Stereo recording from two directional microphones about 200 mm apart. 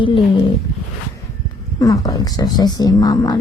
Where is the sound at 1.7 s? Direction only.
15° left (ahead or behind).